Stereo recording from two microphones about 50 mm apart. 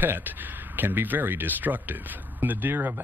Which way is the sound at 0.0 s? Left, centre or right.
Right.